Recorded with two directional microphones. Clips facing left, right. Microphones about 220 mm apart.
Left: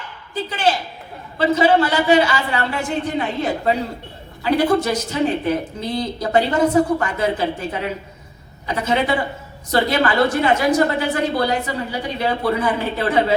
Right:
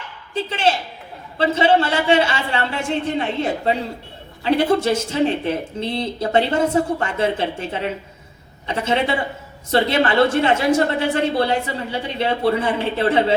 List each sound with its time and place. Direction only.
0.3 s a woman's voice: 25° right (ahead or behind)